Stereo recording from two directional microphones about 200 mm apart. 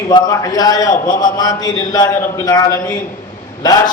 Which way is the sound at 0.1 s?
20° left (ahead or behind).